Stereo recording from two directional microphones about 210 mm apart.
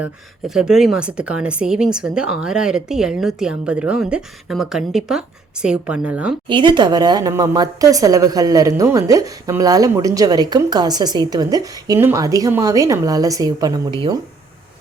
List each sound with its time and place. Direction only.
0.0 s a woman's voice: 5° right (ahead or behind)
6.5 s speech: 20° right (ahead or behind)